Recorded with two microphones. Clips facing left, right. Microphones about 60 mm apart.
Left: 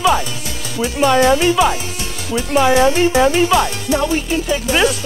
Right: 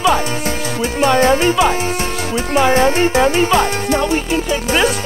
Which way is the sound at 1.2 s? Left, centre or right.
Right.